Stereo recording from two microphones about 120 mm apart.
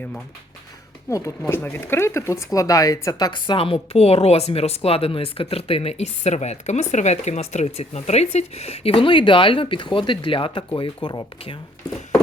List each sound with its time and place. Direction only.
1.4 s speech: 20° left (ahead or behind); by 11.3 s 40° left (ahead or behind)